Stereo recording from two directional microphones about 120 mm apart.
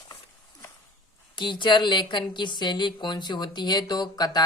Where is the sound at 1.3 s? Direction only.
40° left (ahead or behind).